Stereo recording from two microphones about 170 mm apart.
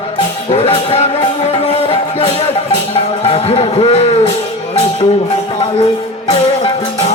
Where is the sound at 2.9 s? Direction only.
35° left (ahead or behind).